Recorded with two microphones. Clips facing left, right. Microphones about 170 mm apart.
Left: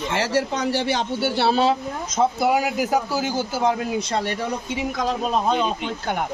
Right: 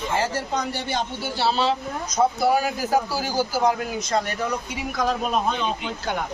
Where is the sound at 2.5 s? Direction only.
20° left (ahead or behind).